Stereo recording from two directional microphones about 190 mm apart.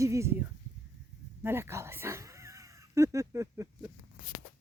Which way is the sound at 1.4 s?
15° right (ahead or behind).